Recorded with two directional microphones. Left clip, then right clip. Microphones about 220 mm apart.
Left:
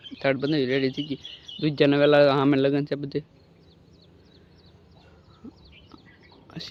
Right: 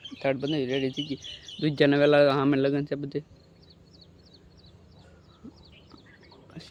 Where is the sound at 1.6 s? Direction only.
5° left (ahead or behind).